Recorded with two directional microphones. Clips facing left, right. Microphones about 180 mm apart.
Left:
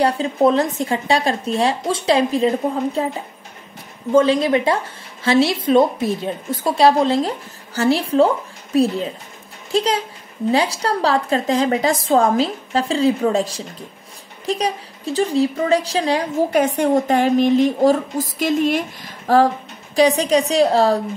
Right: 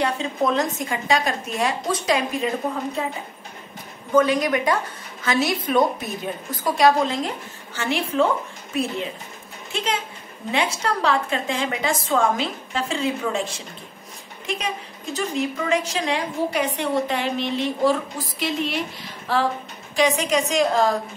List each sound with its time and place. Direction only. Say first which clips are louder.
0.0 s a woman's voice: left 7 dB; 30° left (ahead or behind)
4.1 s a woman's voice: left 4 dB; 30° left (ahead or behind)
16.4 s a woman's voice: left 8 dB; 45° left (ahead or behind)